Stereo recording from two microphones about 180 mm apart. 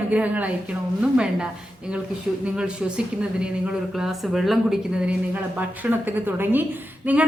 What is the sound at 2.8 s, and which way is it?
A woman's voice, 5° right (ahead or behind).